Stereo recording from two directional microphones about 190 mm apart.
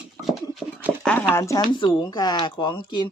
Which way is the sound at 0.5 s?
Centre (ahead or behind).